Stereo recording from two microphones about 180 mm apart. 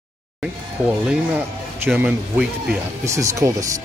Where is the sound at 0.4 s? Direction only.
5° right (ahead or behind).